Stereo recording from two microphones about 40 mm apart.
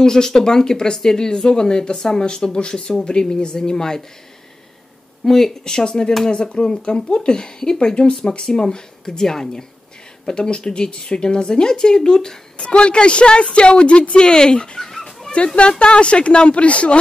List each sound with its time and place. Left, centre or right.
0.0 s speech: centre
5.2 s a woman's voice: centre
14.8 s a sound: centre
15.3 s a woman's voice: left